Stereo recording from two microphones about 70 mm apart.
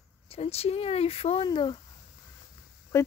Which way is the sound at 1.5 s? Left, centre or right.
Left.